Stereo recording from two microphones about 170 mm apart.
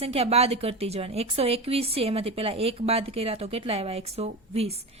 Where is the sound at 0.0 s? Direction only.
35° right (ahead or behind).